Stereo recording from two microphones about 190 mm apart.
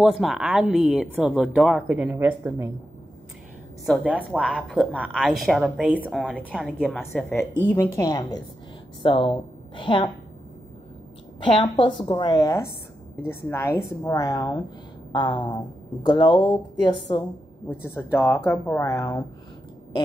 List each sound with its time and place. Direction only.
0.0 s a woman's voice: centre (ahead or behind)
3.8 s a woman's voice: centre (ahead or behind); by 10.1 s 25° left (ahead or behind)
11.3 s speech: 25° left (ahead or behind)
17.6 s speech: 10° left (ahead or behind)